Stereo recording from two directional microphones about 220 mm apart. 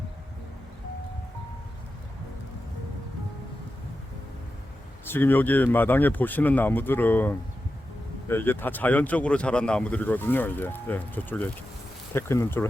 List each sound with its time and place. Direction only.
5.0 s speech: 10° left (ahead or behind)